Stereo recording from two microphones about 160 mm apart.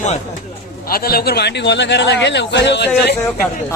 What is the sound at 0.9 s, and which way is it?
A man's voice, 70° left (ahead or behind).